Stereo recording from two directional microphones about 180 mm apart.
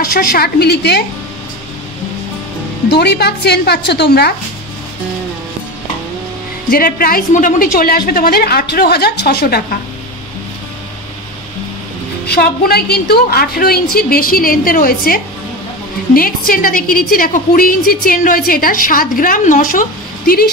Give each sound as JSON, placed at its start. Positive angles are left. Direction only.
{"t": 0.0, "sound": "a woman's voice", "side_deg": 55}
{"t": 2.9, "sound": "a woman's voice", "side_deg": 65}
{"t": 6.7, "sound": "a woman's voice", "side_deg": 55}
{"t": 12.3, "sound": "a woman's voice", "side_deg": 60}
{"t": 16.2, "sound": "a woman's voice", "side_deg": 50}